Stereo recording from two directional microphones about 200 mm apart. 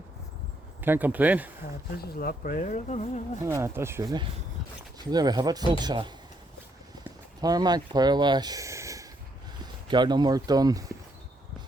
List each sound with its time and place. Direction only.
0.8 s speech: 10° right (ahead or behind)
2.1 s speech: 45° left (ahead or behind)
3.4 s speech: 15° right (ahead or behind)
7.4 s speech: 20° right (ahead or behind)